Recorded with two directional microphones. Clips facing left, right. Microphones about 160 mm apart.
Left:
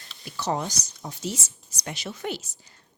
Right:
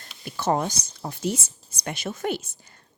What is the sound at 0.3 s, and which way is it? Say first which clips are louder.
A woman's voice: right 4 dB; 50° right (ahead or behind).